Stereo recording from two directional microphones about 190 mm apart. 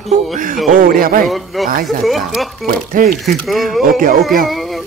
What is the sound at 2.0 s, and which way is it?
Speech, centre (ahead or behind).